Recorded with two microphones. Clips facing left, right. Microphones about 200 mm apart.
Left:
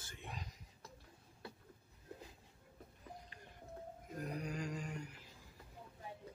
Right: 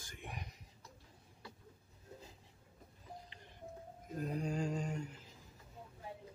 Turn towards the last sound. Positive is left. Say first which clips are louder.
# right 5 dB
turn(degrees=-25)  # may be behind; listen again after turning